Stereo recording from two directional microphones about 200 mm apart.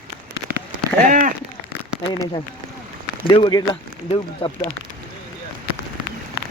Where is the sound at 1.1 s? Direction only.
40° right (ahead or behind).